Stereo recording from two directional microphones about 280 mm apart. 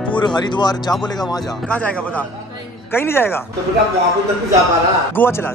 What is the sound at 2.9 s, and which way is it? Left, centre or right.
Speech, centre.